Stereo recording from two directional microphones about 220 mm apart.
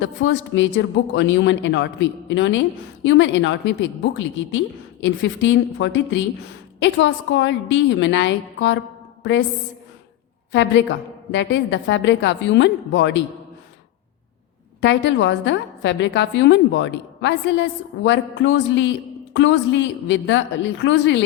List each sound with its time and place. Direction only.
0.0 s speech: 55° left (ahead or behind)
10.5 s speech: 55° left (ahead or behind)
14.8 s speech: 55° left (ahead or behind)